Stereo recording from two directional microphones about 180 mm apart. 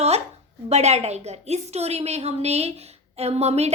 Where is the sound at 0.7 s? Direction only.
35° right (ahead or behind).